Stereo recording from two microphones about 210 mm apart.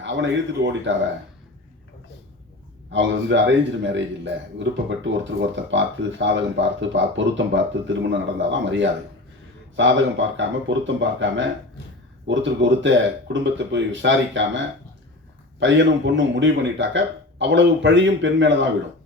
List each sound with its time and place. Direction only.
0.0 s a man's voice: 60° right (ahead or behind)
2.9 s a man's voice: 60° right (ahead or behind)
15.6 s a man's voice: 60° right (ahead or behind)